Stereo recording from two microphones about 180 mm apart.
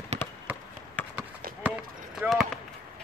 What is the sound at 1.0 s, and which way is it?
Basketball bounce, 10° left (ahead or behind).